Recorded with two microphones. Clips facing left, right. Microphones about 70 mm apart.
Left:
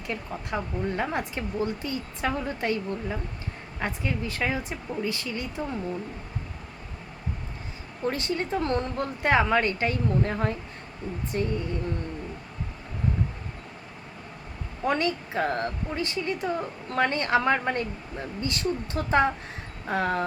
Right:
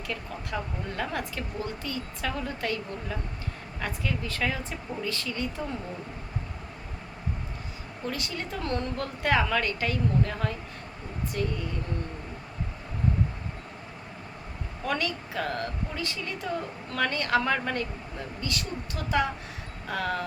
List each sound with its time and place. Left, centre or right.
0.1 s speech: left
8.0 s speech: left
14.8 s speech: left